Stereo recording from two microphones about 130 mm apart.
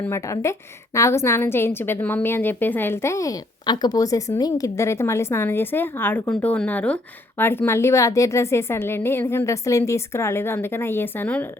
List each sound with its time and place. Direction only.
0.1 s a woman's voice: 20° left (ahead or behind)